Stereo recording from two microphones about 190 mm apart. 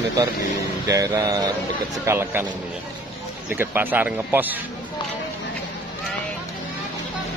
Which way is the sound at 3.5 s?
10° right (ahead or behind).